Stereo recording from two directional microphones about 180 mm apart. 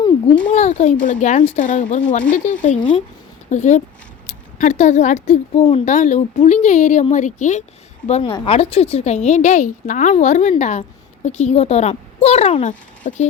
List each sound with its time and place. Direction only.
0.4 s a woman's voice: 40° left (ahead or behind)